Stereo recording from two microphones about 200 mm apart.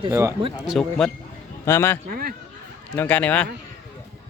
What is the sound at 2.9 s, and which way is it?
Speech, 10° left (ahead or behind).